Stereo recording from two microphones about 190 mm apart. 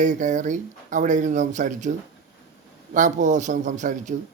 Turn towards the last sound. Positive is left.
turn(degrees=-40)  # may be behind; listen again after turning